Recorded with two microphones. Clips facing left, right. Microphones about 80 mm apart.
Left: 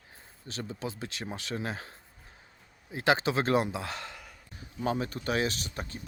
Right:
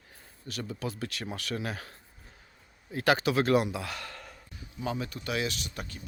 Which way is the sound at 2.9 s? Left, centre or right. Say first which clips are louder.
Right 1 dB; left.